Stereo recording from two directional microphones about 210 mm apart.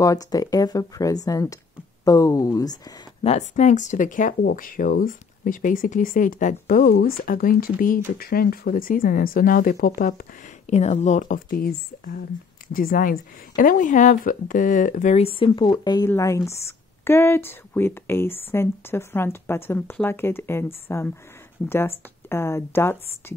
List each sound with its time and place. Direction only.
0.0 s a woman's voice: 15° left (ahead or behind)
3.3 s speech: 35° left (ahead or behind)
10.7 s a woman's voice: 30° left (ahead or behind); by 23.3 s 10° left (ahead or behind)